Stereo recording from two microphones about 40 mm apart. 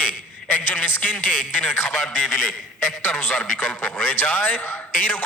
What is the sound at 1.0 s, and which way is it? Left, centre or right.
Speech, left.